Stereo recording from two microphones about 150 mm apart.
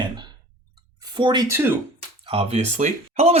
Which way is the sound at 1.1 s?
30° right (ahead or behind).